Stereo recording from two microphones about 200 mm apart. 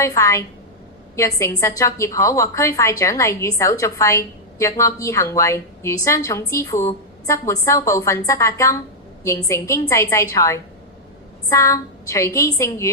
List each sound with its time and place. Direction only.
0.0 s a woman's voice: 15° left (ahead or behind)